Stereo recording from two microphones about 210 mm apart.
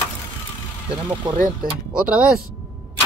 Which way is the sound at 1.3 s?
20° right (ahead or behind).